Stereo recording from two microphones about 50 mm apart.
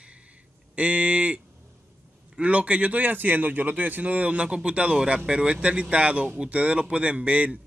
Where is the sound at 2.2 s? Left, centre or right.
Right.